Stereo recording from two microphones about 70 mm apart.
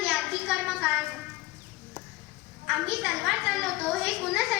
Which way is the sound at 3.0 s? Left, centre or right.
Centre.